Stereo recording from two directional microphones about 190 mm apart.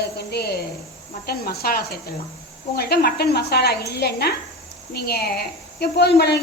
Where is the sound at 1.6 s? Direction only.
55° left (ahead or behind).